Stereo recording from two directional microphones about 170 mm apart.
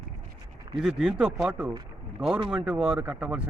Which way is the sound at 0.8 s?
5° right (ahead or behind).